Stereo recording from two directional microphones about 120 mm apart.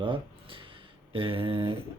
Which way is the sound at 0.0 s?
45° right (ahead or behind).